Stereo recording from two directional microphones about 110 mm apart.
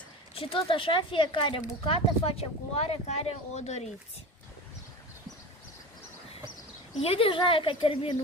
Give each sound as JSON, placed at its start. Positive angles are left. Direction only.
{"t": 0.3, "sound": "speech", "side_deg": 55}
{"t": 1.9, "sound": "speech", "side_deg": 60}
{"t": 7.0, "sound": "speech", "side_deg": 55}